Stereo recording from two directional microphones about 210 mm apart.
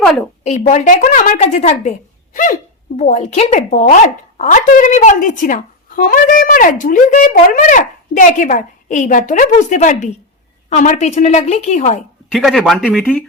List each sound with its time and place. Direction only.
0.7 s speech: 35° left (ahead or behind)
2.3 s hiccup: 40° left (ahead or behind)
3.0 s speech: 35° left (ahead or behind)
12.3 s speech: centre (ahead or behind)